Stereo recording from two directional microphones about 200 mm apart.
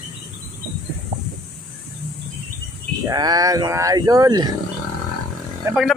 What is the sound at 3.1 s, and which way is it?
Speech, 20° right (ahead or behind).